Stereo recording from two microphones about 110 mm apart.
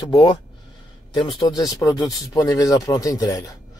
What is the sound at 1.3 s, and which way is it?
A man's voice, 35° left (ahead or behind).